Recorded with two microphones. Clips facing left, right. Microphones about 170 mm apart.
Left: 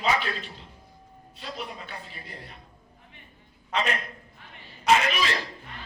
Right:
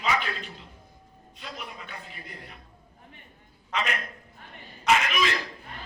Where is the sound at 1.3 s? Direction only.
30° left (ahead or behind).